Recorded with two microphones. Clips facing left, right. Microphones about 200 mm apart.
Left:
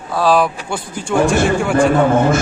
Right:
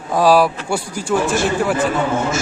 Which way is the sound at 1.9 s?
55° left (ahead or behind).